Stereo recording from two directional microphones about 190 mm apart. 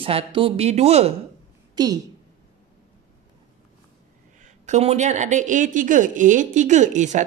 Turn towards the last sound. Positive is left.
turn(degrees=-40)  # may be behind; listen again after turning